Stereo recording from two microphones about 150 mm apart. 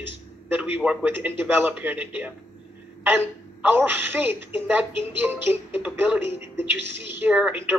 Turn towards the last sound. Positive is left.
turn(degrees=-10)  # may be behind; listen again after turning